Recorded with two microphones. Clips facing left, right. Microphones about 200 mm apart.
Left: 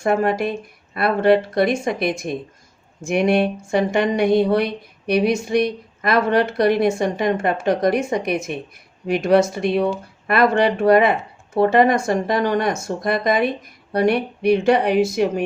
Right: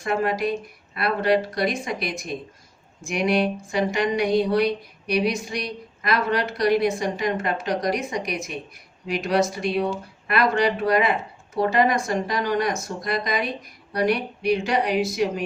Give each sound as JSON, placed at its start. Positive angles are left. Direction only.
{"t": 0.0, "sound": "speech", "side_deg": 50}